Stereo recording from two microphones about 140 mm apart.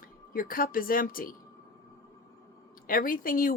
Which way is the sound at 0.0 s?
90° left.